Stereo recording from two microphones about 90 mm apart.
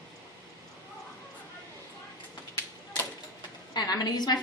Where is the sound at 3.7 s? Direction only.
45° left (ahead or behind).